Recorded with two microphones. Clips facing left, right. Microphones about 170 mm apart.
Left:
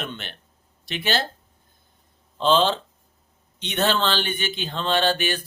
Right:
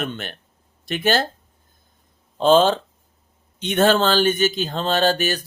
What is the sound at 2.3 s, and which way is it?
Speech, 45° right (ahead or behind).